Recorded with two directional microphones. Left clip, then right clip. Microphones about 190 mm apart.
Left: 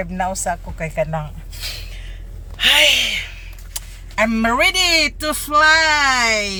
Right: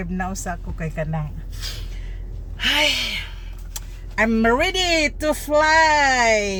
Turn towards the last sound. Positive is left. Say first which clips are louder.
# left 1 dB
turn(degrees=-10)  # may be behind; listen again after turning